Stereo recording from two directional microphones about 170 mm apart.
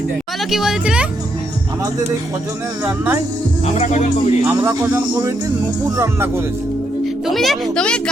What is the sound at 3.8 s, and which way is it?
Speech, 45° left (ahead or behind).